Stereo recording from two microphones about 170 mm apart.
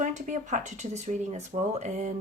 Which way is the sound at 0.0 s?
45° right (ahead or behind).